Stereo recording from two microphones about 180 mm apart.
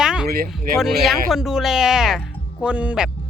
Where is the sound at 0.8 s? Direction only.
Centre (ahead or behind).